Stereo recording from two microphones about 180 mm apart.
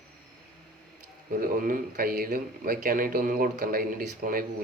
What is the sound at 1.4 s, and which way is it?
Speech, 50° right (ahead or behind).